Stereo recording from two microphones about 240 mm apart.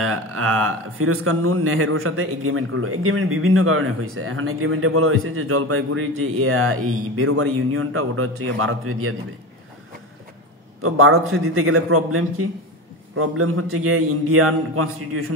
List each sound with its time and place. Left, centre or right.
0.0 s speech: right
10.8 s speech: right